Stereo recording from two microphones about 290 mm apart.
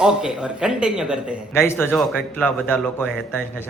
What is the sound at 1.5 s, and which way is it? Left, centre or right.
A man's voice, centre.